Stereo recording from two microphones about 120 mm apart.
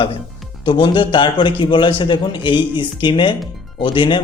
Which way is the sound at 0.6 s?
45° left (ahead or behind).